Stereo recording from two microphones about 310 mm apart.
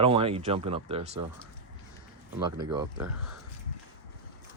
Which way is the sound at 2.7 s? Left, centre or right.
Centre.